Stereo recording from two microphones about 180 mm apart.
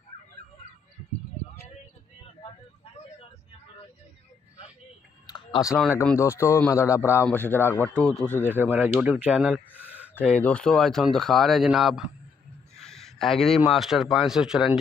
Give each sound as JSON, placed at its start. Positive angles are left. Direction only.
{"t": 5.2, "sound": "clicking", "side_deg": 25}
{"t": 6.1, "sound": "speech", "side_deg": 15}
{"t": 8.5, "sound": "speech", "side_deg": -10}
{"t": 10.2, "sound": "speech", "side_deg": 5}
{"t": 12.7, "sound": "a sound", "side_deg": 0}
{"t": 13.7, "sound": "speech", "side_deg": 0}